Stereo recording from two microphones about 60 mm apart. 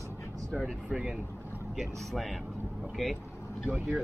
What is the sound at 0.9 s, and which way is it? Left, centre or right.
Speech, centre.